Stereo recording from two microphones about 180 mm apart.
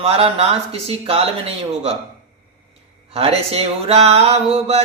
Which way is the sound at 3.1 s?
35° right (ahead or behind).